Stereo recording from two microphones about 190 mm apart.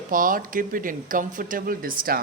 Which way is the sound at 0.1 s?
45° right (ahead or behind).